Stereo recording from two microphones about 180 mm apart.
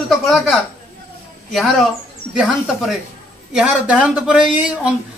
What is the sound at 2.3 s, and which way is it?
A man's voice, centre (ahead or behind).